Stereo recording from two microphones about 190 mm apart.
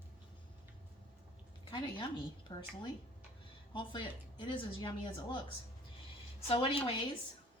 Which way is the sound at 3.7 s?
25° left (ahead or behind).